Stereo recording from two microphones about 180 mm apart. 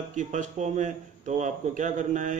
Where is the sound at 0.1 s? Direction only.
45° right (ahead or behind).